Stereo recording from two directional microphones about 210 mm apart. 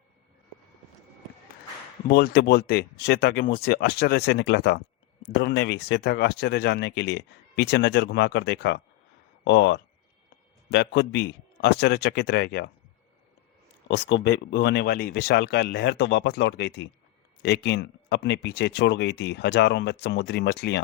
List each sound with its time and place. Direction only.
2.0 s speech: 45° left (ahead or behind)
13.8 s speech: 60° left (ahead or behind)